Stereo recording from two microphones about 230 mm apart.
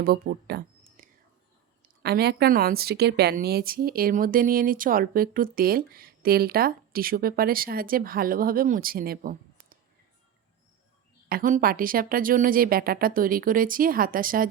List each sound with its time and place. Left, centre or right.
0.0 s a woman's voice: right
11.3 s a woman's voice: right